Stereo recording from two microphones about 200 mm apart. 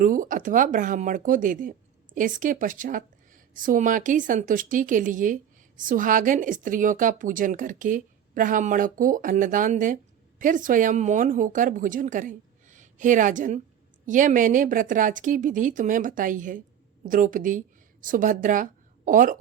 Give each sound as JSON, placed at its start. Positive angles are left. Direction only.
{"t": 0.0, "sound": "a woman's voice", "side_deg": -40}